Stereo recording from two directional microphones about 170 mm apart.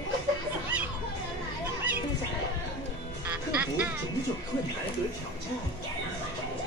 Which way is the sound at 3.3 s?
10° right (ahead or behind).